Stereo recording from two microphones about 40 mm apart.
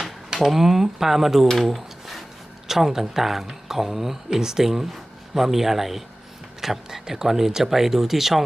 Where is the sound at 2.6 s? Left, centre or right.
Centre.